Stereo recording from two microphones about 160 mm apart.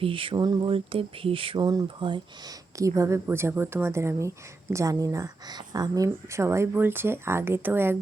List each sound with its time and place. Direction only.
0.0 s speech: 35° right (ahead or behind); by 7.9 s 15° right (ahead or behind)